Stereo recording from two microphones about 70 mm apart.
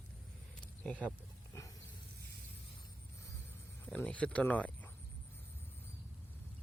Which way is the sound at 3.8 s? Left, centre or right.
Left.